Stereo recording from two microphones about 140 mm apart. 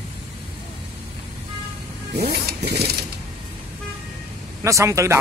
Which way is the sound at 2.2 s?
90° right.